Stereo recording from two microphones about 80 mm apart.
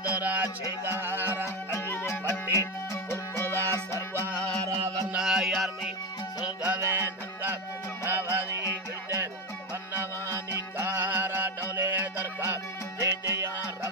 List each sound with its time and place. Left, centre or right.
0.1 s music: centre
1.4 s music: left
5.1 s music: centre
6.8 s music: right
10.8 s music: right